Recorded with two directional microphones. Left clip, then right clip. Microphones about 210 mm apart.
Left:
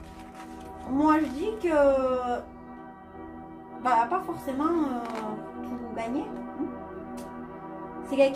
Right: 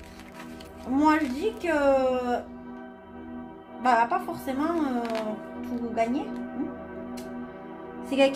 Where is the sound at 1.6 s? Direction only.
35° right (ahead or behind).